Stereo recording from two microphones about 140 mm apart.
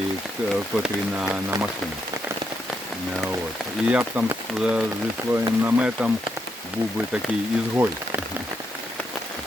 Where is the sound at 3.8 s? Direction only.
10° right (ahead or behind).